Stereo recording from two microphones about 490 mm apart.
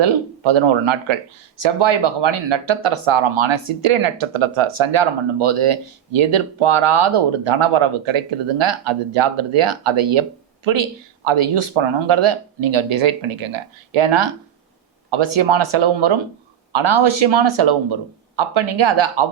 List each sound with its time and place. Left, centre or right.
0.0 s speech: right
11.3 s speech: right
12.3 s speech: right
15.3 s speech: right